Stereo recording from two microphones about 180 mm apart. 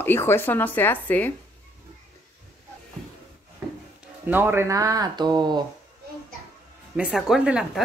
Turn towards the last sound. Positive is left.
turn(degrees=-5)  # may be behind; listen again after turning